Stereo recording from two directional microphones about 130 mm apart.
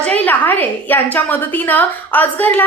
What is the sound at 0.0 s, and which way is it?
A woman's voice, 15° left (ahead or behind).